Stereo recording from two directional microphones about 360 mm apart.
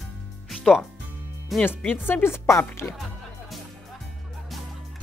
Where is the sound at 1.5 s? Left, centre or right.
Centre.